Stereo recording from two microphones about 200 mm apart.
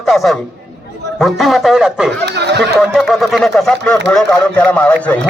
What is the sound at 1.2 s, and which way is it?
Speech, centre (ahead or behind).